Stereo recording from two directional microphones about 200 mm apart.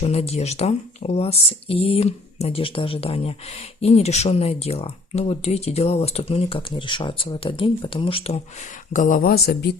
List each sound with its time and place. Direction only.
0.0 s speech: 30° left (ahead or behind)
8.9 s speech: 40° left (ahead or behind)